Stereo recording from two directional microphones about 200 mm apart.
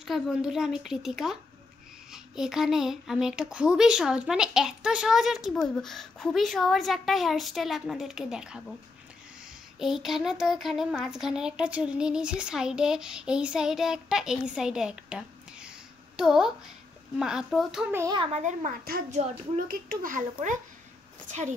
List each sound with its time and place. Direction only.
0.0 s a child's voice: centre (ahead or behind)
9.8 s a child's voice: centre (ahead or behind)
17.9 s a child's voice: 20° right (ahead or behind); by 21.5 s 35° right (ahead or behind)